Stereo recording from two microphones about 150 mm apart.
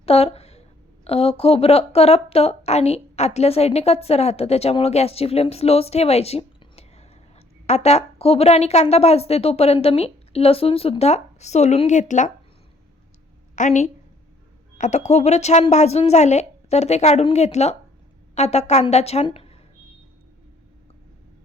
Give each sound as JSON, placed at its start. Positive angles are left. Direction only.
{"t": 0.0, "sound": "a sound", "side_deg": 40}
{"t": 1.0, "sound": "a woman's voice", "side_deg": 40}
{"t": 13.6, "sound": "a woman's voice", "side_deg": 55}